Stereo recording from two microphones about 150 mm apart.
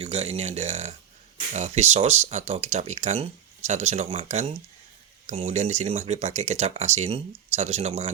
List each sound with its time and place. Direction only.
0.0 s speech: 45° right (ahead or behind)
5.2 s a sound: 40° right (ahead or behind)
5.5 s speech: 50° right (ahead or behind)